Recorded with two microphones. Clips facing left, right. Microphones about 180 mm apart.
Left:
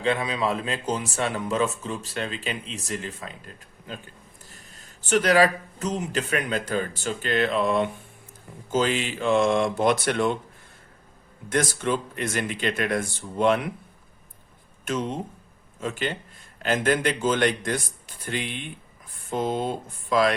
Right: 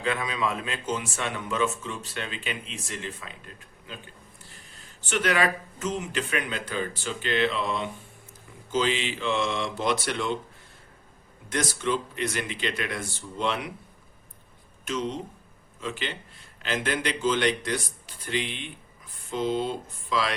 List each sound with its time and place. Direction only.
0.0 s a man's voice: 30° left (ahead or behind); by 10.3 s 50° left (ahead or behind)
11.4 s speech: 50° left (ahead or behind)
14.8 s speech: 55° left (ahead or behind)